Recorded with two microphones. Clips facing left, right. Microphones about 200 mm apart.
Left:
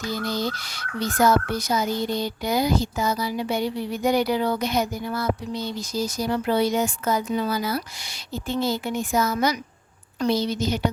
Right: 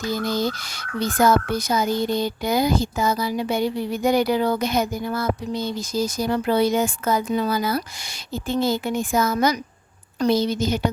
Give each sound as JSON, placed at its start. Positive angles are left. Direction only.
{"t": 0.1, "sound": "speech", "side_deg": -45}